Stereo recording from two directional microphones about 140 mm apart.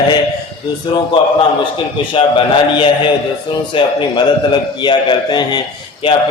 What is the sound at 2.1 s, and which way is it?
Speech, 35° left (ahead or behind).